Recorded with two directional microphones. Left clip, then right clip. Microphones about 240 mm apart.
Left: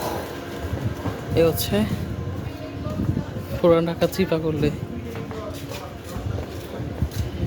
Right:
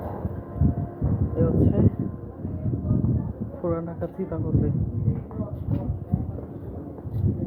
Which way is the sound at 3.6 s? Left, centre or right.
Left.